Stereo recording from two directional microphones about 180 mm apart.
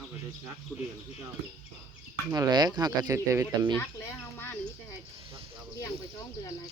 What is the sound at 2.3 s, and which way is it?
Speech, 20° right (ahead or behind).